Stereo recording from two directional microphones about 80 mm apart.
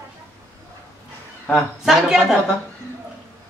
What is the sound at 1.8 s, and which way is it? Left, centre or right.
Speech, centre.